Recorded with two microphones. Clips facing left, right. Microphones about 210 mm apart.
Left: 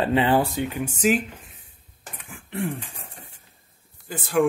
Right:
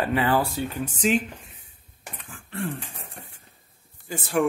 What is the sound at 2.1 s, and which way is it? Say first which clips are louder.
Throat clearing: left 3 dB; 15° left (ahead or behind).